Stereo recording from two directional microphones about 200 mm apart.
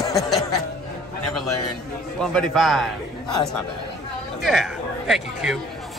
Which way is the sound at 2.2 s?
Centre (ahead or behind).